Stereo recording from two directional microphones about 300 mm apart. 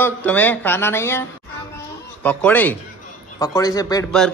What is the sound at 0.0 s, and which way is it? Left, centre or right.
Speech, centre.